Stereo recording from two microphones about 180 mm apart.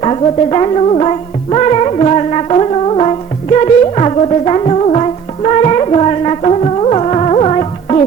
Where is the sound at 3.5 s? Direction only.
35° left (ahead or behind).